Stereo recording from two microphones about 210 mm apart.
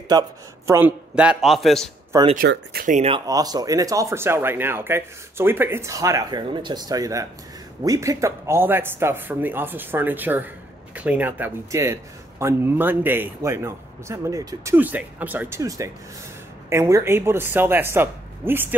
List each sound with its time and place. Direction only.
0.1 s a man's voice: 15° right (ahead or behind); by 1.9 s centre (ahead or behind)
2.3 s speech: 50° right (ahead or behind)
3.1 s a man's voice: 20° right (ahead or behind)